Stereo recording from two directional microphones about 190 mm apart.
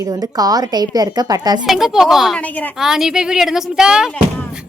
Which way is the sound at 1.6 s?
Centre (ahead or behind).